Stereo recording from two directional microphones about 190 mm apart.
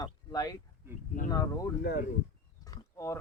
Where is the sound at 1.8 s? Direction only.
60° left (ahead or behind).